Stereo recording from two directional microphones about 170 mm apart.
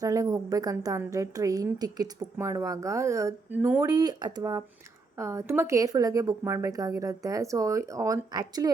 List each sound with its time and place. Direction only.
0.0 s a woman's voice: 20° right (ahead or behind)